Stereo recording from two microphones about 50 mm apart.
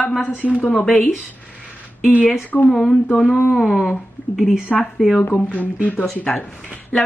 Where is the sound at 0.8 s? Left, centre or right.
Centre.